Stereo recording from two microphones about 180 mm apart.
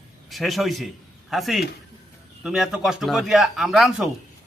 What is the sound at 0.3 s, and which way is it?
A man's voice, centre (ahead or behind).